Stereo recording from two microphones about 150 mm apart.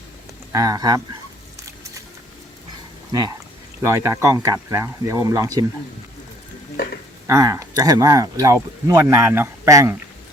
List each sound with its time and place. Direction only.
0.5 s speech: 25° right (ahead or behind)
3.1 s speech: 25° right (ahead or behind)
7.3 s speech: 20° right (ahead or behind)